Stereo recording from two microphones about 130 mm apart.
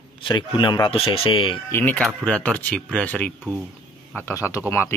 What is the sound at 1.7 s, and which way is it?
Speech, 15° left (ahead or behind).